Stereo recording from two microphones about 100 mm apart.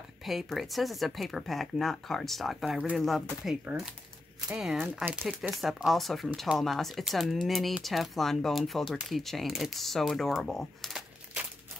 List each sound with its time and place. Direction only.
0.2 s speech: centre (ahead or behind)
3.7 s speech: 15° right (ahead or behind)
5.5 s speech: centre (ahead or behind)